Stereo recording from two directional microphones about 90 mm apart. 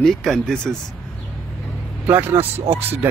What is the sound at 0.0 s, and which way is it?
Speech, centre (ahead or behind).